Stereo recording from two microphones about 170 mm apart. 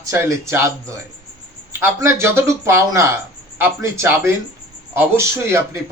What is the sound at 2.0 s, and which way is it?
Speech, 15° right (ahead or behind).